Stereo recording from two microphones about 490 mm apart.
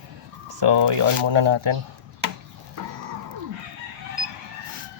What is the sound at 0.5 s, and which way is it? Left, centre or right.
Speech, right.